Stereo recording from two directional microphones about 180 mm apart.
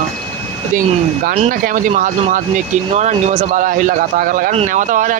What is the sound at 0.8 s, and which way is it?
Speech, 55° right (ahead or behind).